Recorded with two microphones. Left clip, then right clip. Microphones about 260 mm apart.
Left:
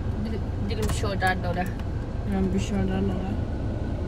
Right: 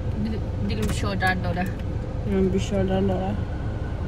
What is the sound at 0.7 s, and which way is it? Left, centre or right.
Speech, left.